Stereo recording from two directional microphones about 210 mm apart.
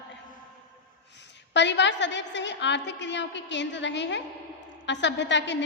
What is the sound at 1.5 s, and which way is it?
A woman's voice, 55° left (ahead or behind).